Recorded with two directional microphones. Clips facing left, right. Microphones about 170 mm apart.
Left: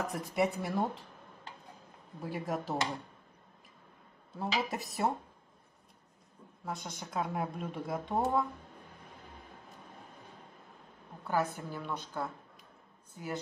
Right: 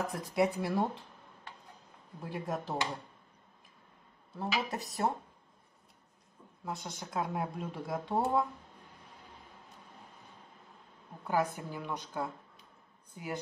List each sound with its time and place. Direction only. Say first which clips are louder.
0.1 s speech: right 1 dB; centre (ahead or behind)
2.2 s speech: left 1 dB; 5° left (ahead or behind)
4.4 s speech: left 1 dB; 10° left (ahead or behind)
6.6 s speech: even; centre (ahead or behind)
11.2 s a woman's voice: right 1 dB; 15° right (ahead or behind)